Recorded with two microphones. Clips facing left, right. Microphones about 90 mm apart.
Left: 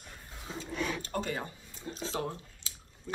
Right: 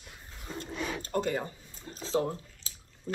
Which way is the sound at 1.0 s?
40° right (ahead or behind).